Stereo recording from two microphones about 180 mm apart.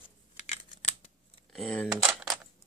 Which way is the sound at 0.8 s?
35° left (ahead or behind).